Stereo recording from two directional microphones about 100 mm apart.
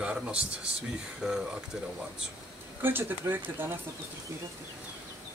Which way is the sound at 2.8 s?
20° right (ahead or behind).